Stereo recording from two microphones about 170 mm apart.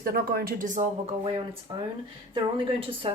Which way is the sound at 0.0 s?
60° right (ahead or behind).